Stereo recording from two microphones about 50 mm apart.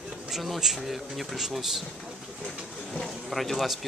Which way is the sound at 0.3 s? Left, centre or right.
Centre.